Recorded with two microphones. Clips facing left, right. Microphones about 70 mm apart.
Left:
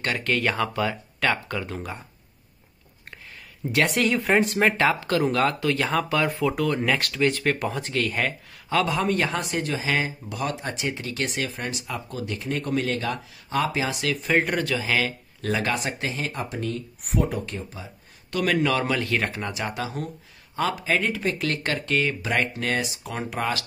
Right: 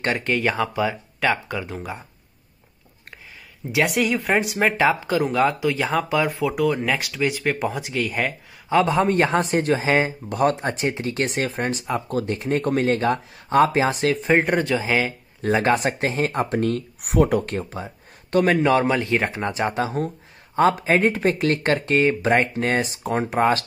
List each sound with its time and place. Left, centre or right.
0.0 s speech: right
3.7 s speech: centre
8.6 s speech: right
15.7 s speech: right
18.3 s speech: right